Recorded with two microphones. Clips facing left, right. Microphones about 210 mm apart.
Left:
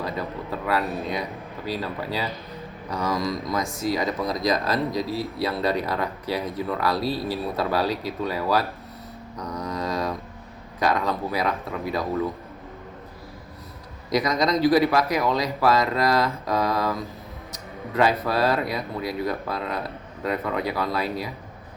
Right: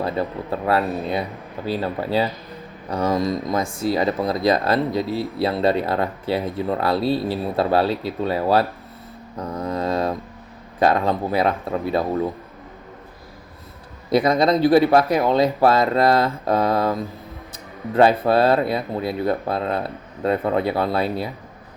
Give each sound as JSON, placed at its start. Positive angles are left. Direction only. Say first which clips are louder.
{"t": 0.0, "sound": "speech", "louder": "right 5 dB", "side_deg": -30}
{"t": 9.3, "sound": "mantra", "louder": "right 5 dB", "side_deg": -30}
{"t": 10.8, "sound": "speech", "louder": "right 5 dB", "side_deg": -30}
{"t": 14.1, "sound": "speech", "louder": "right 5 dB", "side_deg": -30}